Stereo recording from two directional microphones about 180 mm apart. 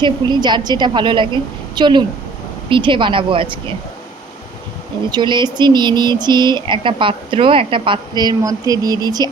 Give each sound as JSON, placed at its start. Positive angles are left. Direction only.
{"t": 0.0, "sound": "speech", "side_deg": -25}
{"t": 5.1, "sound": "speech", "side_deg": -25}